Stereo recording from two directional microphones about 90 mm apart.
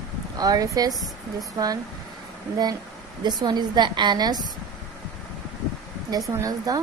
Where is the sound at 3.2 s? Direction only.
55° right (ahead or behind).